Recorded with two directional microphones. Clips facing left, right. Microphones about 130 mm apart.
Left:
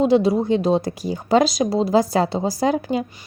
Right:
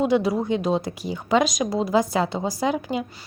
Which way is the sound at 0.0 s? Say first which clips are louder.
Left 4 dB; 30° left (ahead or behind).